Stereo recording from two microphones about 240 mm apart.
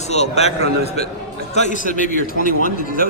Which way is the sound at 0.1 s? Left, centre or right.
Left.